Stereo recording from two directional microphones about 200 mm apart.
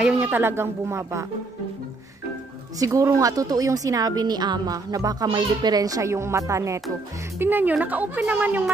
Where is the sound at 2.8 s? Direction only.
15° right (ahead or behind).